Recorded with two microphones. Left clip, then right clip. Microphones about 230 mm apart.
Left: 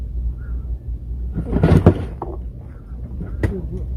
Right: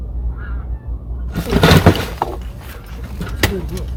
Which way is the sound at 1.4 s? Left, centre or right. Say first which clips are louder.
Right 6 dB; right.